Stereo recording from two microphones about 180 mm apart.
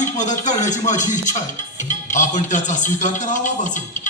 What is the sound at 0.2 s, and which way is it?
Speech, 40° left (ahead or behind).